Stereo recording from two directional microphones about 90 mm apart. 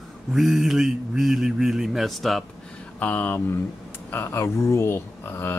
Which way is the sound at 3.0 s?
20° left (ahead or behind).